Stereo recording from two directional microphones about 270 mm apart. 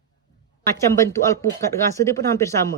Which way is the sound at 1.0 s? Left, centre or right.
Centre.